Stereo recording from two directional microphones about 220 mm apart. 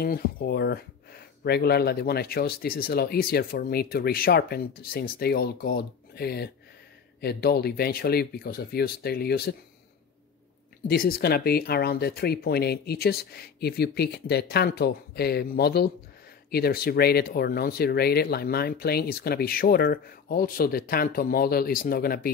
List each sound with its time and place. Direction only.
0.0 s speech: 40° left (ahead or behind)
10.9 s speech: 40° left (ahead or behind)